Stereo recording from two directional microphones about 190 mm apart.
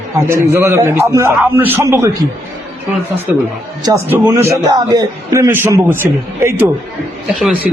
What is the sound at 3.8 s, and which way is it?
A man's voice, 15° right (ahead or behind).